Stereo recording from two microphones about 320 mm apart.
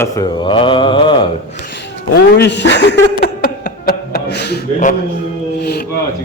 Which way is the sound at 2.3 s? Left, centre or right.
Left.